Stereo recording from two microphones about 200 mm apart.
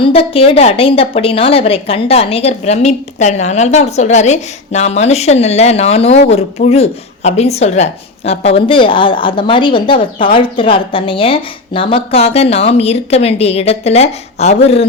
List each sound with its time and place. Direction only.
0.0 s a woman's voice: 30° left (ahead or behind)